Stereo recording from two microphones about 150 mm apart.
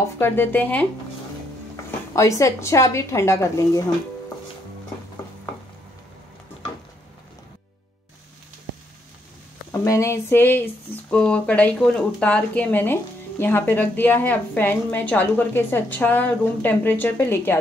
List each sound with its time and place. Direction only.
0.2 s speech: 15° left (ahead or behind)
2.1 s a woman's voice: 20° left (ahead or behind)
9.7 s speech: 20° left (ahead or behind)